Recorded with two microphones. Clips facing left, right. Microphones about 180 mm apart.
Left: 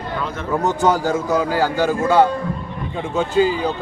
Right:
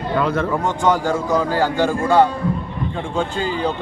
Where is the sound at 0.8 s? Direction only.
5° left (ahead or behind).